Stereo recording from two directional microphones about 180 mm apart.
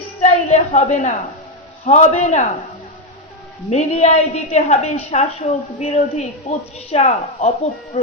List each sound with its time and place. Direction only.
0.2 s a woman's voice: 40° left (ahead or behind)
3.7 s a woman's voice: 35° left (ahead or behind)